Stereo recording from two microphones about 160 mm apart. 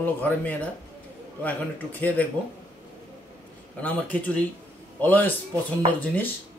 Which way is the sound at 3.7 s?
10° left (ahead or behind).